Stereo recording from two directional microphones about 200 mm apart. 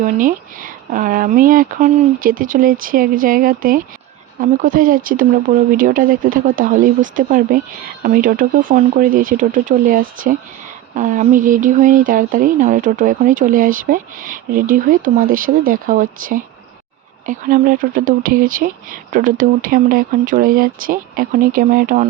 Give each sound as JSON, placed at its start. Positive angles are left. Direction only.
{"t": 0.0, "sound": "speech", "side_deg": -45}